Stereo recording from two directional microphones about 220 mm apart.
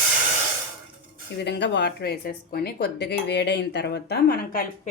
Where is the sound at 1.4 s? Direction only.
50° left (ahead or behind).